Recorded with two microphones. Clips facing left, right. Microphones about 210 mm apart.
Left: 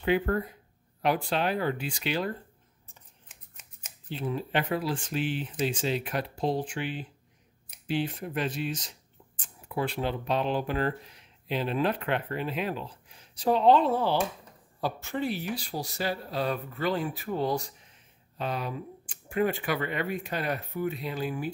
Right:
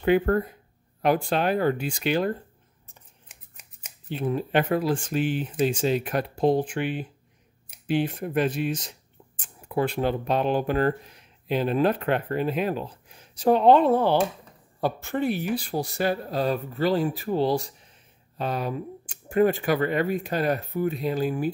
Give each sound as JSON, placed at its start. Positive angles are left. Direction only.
{"t": 0.0, "sound": "speech", "side_deg": -50}
{"t": 4.1, "sound": "speech", "side_deg": -55}
{"t": 18.4, "sound": "speech", "side_deg": -45}